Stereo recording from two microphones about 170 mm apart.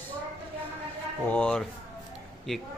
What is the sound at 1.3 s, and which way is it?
Speech, 5° left (ahead or behind).